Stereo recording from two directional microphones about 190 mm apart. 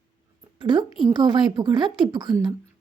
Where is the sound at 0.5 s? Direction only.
25° right (ahead or behind).